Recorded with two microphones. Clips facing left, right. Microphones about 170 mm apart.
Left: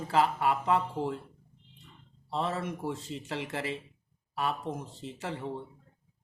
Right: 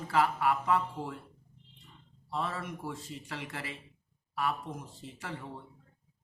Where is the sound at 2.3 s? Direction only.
25° left (ahead or behind).